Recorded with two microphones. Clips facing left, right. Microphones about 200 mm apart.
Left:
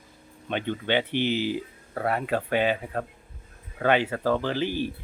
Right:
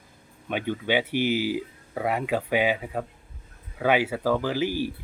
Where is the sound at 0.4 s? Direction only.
10° right (ahead or behind).